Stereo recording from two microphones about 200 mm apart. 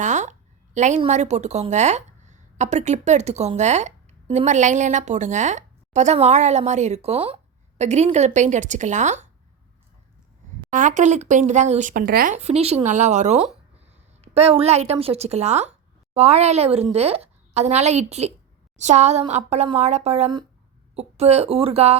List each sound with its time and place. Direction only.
0.0 s a woman's voice: 35° right (ahead or behind)
10.7 s a woman's voice: 40° right (ahead or behind)
12.4 s a woman's voice: 30° right (ahead or behind)